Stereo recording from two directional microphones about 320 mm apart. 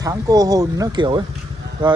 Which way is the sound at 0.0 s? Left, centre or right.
Centre.